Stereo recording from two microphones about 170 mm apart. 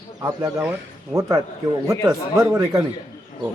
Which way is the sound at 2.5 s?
20° right (ahead or behind).